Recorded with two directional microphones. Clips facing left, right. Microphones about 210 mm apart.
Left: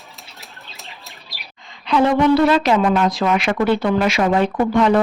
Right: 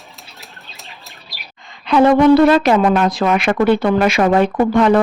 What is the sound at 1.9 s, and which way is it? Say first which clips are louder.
A woman's voice: right 5 dB; 55° right (ahead or behind).